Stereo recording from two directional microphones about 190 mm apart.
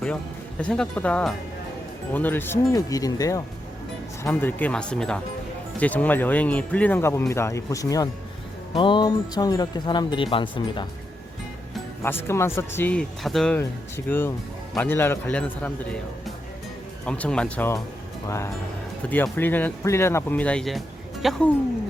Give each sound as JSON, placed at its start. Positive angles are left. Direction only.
{"t": 0.6, "sound": "speech", "side_deg": 5}
{"t": 12.0, "sound": "speech", "side_deg": 15}
{"t": 13.6, "sound": "speech", "side_deg": 10}